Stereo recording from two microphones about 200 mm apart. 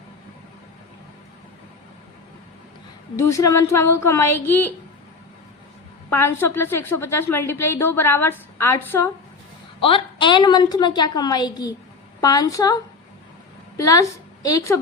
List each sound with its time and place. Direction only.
3.2 s a woman's voice: 15° left (ahead or behind)
6.1 s a woman's voice: 10° left (ahead or behind)
9.8 s a woman's voice: 25° left (ahead or behind)